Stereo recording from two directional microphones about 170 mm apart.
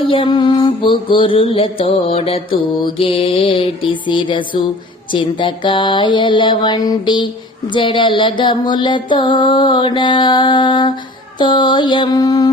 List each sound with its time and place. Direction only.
0.1 s mantra: 30° left (ahead or behind)
5.1 s music: 30° left (ahead or behind)